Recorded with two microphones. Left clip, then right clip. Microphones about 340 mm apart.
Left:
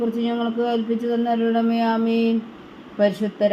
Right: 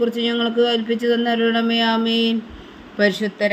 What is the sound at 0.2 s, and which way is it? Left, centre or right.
Speech, right.